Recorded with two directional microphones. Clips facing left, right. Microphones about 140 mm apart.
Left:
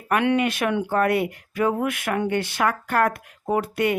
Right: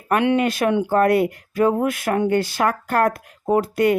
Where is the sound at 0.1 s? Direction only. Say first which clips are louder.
Right 2 dB; 35° right (ahead or behind).